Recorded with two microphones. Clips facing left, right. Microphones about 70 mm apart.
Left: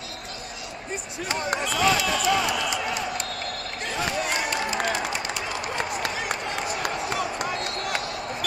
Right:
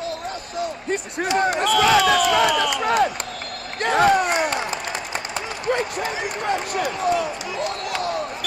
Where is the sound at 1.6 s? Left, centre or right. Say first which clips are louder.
Right 6 dB; right.